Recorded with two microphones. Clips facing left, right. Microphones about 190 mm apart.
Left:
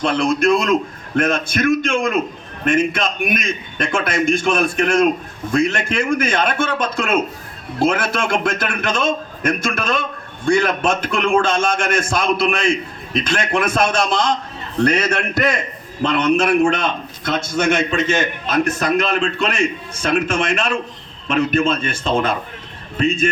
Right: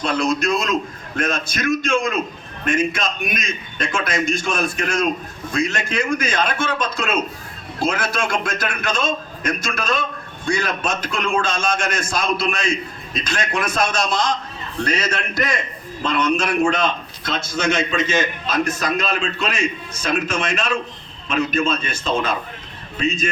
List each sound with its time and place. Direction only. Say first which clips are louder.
0.0 s a man's voice: left 3 dB; 55° left (ahead or behind)